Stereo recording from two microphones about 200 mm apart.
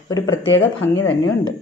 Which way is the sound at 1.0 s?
90° left.